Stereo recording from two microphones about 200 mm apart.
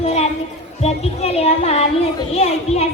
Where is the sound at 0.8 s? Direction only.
30° left (ahead or behind).